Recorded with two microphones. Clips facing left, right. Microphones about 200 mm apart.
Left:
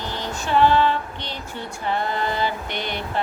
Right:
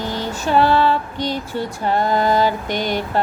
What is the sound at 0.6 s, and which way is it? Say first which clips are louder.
Female singing: left 2 dB; 40° right (ahead or behind).